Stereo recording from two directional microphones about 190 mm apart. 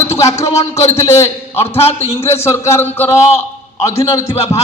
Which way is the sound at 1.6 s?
30° left (ahead or behind).